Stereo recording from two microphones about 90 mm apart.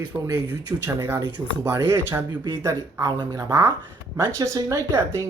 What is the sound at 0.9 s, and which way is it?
Speech, 25° right (ahead or behind).